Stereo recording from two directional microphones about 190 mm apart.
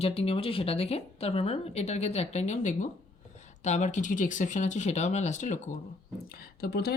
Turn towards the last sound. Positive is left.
turn(degrees=55)  # may be behind; listen again after turning